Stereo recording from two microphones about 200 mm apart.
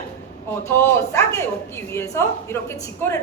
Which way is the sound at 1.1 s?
15° left (ahead or behind).